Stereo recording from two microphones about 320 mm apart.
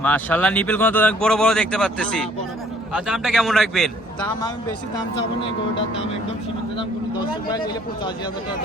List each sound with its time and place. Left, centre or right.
0.0 s speech: centre
5.1 s speech: centre